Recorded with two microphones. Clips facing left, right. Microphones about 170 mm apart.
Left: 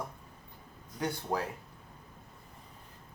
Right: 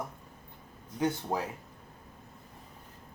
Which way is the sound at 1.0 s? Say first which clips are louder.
Right 3 dB; 20° right (ahead or behind).